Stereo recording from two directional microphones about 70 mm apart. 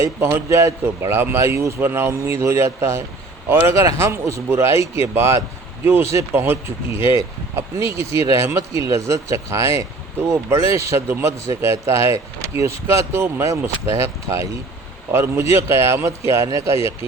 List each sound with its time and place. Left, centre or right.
0.0 s speech: right